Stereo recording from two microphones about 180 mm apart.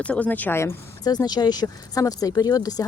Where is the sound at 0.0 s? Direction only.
10° left (ahead or behind).